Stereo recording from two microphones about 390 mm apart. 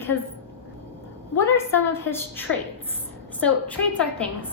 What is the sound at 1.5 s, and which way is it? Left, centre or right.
A woman's voice, centre.